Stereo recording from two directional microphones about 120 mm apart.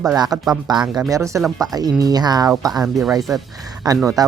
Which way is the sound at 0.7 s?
35° right (ahead or behind).